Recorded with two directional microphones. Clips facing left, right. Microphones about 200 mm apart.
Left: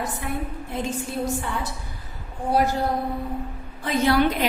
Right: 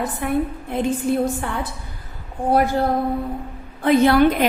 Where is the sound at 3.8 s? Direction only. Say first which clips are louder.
Right 6 dB; 55° right (ahead or behind).